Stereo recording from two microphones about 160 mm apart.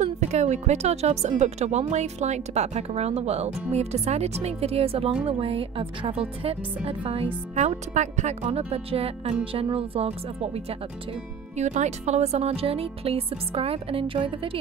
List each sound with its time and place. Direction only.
0.0 s speech: 45° right (ahead or behind)
7.5 s speech: 50° right (ahead or behind)